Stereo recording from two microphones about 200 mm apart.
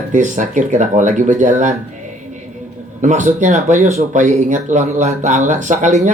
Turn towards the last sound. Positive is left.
turn(degrees=-40)  # may be behind; listen again after turning